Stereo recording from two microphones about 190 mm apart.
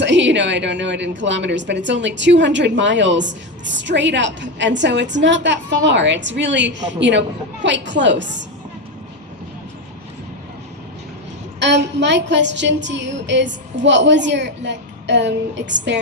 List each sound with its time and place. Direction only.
0.0 s a woman's voice: 70° right (ahead or behind)
11.6 s a woman's voice: 65° right (ahead or behind)